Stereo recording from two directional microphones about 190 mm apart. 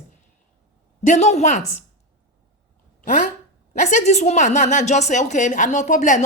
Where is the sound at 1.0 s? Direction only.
35° left (ahead or behind).